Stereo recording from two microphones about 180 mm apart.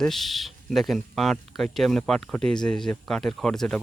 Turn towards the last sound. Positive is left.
turn(degrees=5)  # may be behind; listen again after turning